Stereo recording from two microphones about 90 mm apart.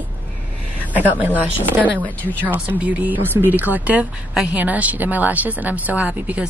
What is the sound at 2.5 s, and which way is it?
Speech, 20° right (ahead or behind).